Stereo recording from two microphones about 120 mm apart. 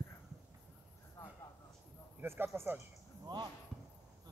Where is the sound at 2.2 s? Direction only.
20° right (ahead or behind).